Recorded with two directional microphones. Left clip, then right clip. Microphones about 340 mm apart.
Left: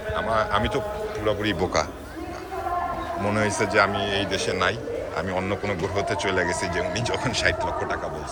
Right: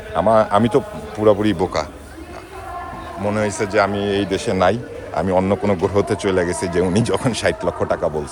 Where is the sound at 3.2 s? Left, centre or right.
Centre.